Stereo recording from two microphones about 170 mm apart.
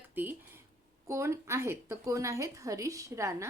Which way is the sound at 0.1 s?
10° right (ahead or behind).